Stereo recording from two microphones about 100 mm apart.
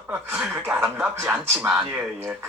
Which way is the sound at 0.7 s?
25° right (ahead or behind).